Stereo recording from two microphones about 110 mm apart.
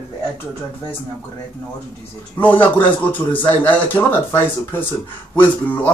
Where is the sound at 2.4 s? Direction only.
15° left (ahead or behind).